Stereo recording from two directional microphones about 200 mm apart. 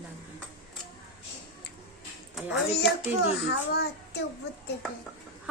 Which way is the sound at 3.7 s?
55° left (ahead or behind).